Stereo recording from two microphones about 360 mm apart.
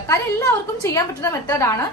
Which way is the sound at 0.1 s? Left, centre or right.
Centre.